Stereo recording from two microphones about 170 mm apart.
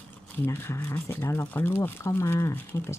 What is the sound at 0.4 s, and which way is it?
Speech, 15° left (ahead or behind).